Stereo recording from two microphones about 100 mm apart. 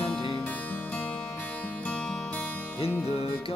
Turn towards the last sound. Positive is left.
turn(degrees=85)